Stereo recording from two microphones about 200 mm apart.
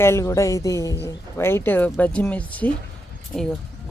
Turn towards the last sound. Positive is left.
turn(degrees=5)  # may be behind; listen again after turning